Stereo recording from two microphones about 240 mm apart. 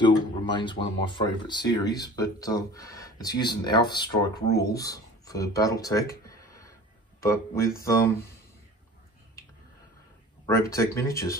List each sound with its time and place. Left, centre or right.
0.0 s speech: centre
10.4 s speech: centre